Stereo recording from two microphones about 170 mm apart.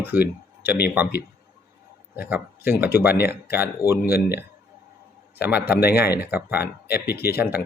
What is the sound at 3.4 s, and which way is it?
Speech, 15° right (ahead or behind).